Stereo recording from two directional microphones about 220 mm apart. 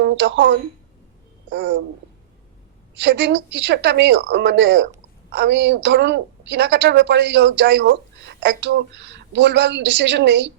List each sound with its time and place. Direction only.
0.0 s speech: 55° right (ahead or behind)
3.0 s a woman's voice: 55° right (ahead or behind)